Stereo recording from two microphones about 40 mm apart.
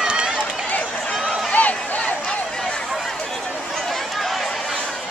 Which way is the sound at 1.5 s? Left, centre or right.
Left.